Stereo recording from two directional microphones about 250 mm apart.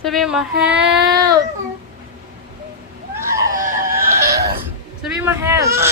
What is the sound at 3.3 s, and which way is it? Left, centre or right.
Screaming, centre.